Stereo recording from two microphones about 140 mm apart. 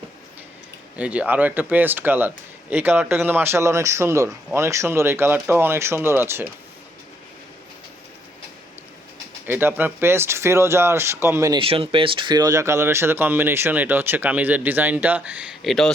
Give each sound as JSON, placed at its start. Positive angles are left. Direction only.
{"t": 0.9, "sound": "speech", "side_deg": -10}
{"t": 9.5, "sound": "speech", "side_deg": -15}
{"t": 11.5, "sound": "speech", "side_deg": -40}
{"t": 15.6, "sound": "speech", "side_deg": 0}